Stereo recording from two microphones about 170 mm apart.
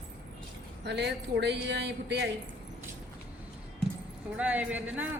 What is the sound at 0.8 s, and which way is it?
Speech, 80° right.